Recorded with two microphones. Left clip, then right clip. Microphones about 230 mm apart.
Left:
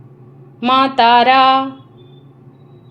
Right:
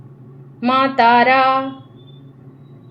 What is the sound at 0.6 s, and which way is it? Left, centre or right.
Speech, left.